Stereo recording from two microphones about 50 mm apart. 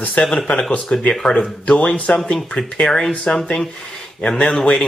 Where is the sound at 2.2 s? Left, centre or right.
Centre.